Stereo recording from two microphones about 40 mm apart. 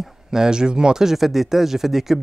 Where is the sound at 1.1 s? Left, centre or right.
Centre.